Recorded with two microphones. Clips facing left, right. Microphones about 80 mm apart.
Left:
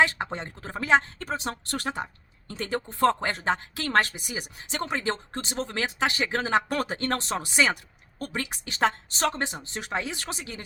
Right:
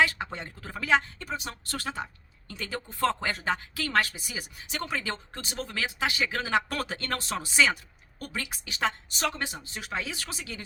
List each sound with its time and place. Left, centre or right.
0.0 s speech: left
1.2 s a woman's voice: left
8.6 s a woman's voice: left
9.3 s speech: left